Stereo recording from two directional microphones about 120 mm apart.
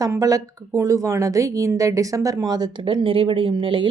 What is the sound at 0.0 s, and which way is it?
A woman's voice, 25° right (ahead or behind).